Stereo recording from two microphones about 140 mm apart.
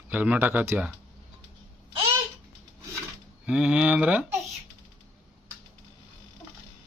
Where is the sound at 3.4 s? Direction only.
5° right (ahead or behind).